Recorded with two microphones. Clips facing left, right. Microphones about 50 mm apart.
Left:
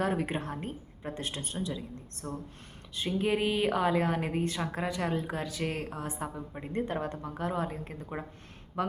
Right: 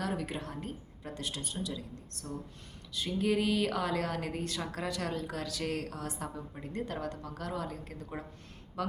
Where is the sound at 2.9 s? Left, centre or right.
Left.